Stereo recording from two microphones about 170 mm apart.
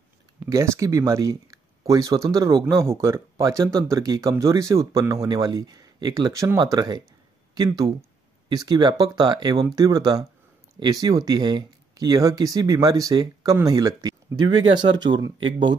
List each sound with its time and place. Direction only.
0.5 s speech: 20° right (ahead or behind)